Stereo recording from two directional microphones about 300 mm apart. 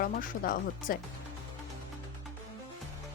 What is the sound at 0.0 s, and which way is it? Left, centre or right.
Speech, left.